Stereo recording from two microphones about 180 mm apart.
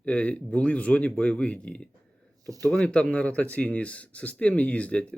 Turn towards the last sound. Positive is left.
turn(degrees=5)  # may be behind; listen again after turning